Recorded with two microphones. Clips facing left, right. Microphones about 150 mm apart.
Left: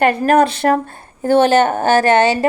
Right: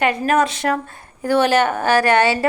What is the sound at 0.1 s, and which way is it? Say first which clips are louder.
Speech: left 4 dB; 55° left (ahead or behind).